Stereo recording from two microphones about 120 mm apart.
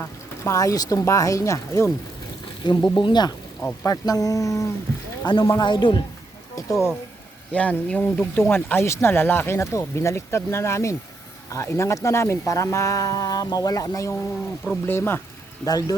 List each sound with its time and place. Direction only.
0.4 s speech: 25° left (ahead or behind)
2.6 s speech: 40° left (ahead or behind)
5.2 s speech: 35° left (ahead or behind)
6.6 s a sound: 25° left (ahead or behind)
7.5 s speech: 10° left (ahead or behind)
15.6 s speech: 30° left (ahead or behind)